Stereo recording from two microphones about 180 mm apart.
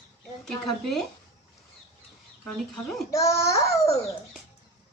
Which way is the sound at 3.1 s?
20° left (ahead or behind).